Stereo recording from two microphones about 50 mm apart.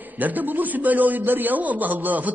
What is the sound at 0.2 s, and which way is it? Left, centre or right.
A man's voice, right.